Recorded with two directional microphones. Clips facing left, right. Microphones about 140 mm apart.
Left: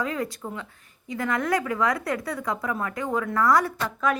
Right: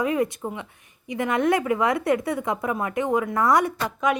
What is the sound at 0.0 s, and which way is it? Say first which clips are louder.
A woman's voice: right 5 dB; 20° right (ahead or behind).